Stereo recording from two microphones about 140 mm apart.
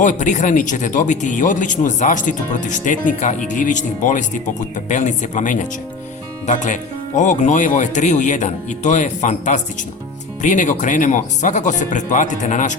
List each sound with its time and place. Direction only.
0.0 s speech: 65° left (ahead or behind)